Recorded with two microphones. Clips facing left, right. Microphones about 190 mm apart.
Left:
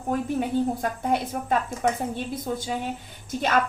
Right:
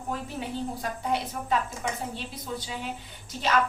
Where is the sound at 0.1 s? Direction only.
50° left (ahead or behind).